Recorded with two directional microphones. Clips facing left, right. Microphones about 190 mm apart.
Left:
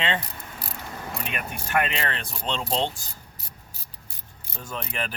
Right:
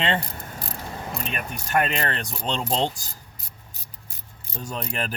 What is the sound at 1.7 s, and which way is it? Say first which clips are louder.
Speech: right 2 dB; 40° right (ahead or behind).